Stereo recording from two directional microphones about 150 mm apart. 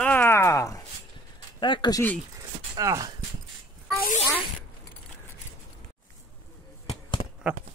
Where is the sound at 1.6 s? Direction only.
30° left (ahead or behind).